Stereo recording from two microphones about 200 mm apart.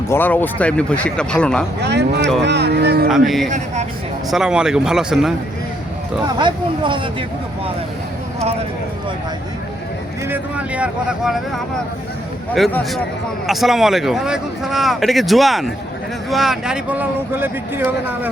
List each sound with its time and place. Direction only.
0.1 s a man's voice: 10° left (ahead or behind)
1.8 s speech: 55° right (ahead or behind)
3.1 s a man's voice: centre (ahead or behind)
6.2 s speech: 25° right (ahead or behind)
10.2 s a man's voice: 10° right (ahead or behind)